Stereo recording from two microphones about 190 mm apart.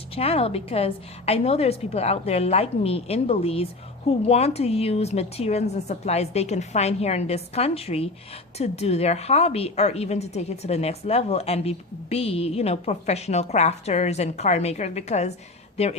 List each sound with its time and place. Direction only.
0.1 s a woman's voice: 30° left (ahead or behind)